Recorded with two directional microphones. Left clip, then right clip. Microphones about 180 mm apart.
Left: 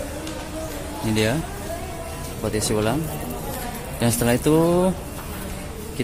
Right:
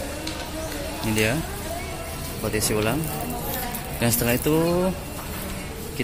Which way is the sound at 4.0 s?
15° left (ahead or behind).